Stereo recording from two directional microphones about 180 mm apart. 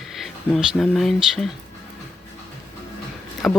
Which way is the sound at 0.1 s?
Centre (ahead or behind).